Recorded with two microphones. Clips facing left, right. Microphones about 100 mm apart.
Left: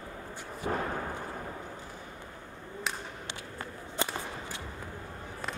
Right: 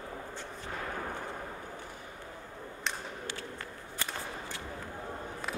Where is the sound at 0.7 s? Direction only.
55° left (ahead or behind).